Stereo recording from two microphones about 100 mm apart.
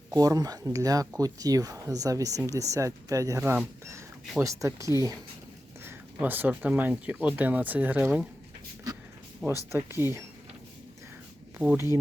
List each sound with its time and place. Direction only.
0.1 s speech: 40° right (ahead or behind)
5.8 s speech: 20° right (ahead or behind)
9.4 s speech: 15° right (ahead or behind)
11.5 s speech: 10° right (ahead or behind)